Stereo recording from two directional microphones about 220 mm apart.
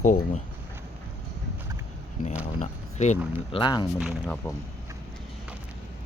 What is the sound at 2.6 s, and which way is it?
Speech, 30° left (ahead or behind).